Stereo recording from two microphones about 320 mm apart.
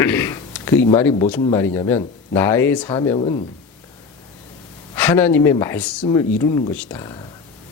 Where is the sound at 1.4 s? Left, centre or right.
Centre.